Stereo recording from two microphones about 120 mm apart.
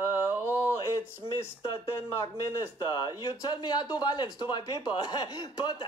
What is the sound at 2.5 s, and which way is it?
A man's voice, 35° left (ahead or behind).